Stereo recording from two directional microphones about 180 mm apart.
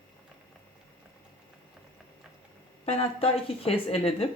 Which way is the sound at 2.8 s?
35° left (ahead or behind).